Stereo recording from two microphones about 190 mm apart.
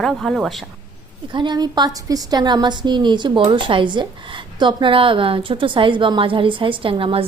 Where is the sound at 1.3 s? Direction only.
25° right (ahead or behind).